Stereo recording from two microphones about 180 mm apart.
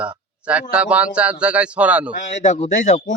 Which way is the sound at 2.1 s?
40° left (ahead or behind).